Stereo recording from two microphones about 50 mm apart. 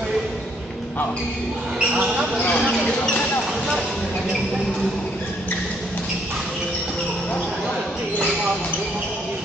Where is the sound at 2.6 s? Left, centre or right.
Centre.